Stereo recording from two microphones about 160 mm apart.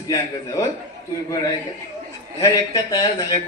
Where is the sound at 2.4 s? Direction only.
20° left (ahead or behind).